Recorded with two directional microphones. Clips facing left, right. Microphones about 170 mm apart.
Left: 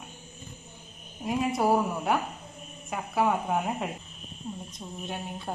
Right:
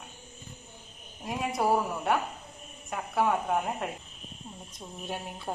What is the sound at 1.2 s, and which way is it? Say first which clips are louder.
A woman's voice: left 3 dB; centre (ahead or behind).